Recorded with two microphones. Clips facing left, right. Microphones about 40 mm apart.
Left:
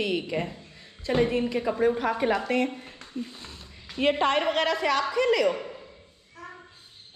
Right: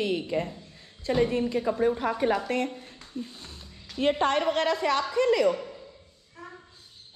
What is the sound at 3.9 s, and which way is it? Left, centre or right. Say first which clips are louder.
Music: left 1 dB; centre.